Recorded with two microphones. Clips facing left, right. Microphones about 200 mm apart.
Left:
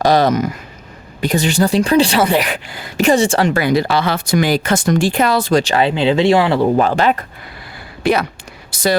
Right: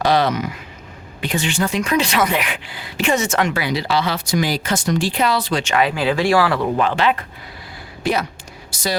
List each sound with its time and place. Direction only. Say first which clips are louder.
0.0 s speech: left 4 dB; 45° left (ahead or behind)
3.6 s speech: left 5 dB; 50° left (ahead or behind)
8.0 s speech: left 5 dB; 65° left (ahead or behind)
8.7 s a sound: left 7 dB; 55° left (ahead or behind)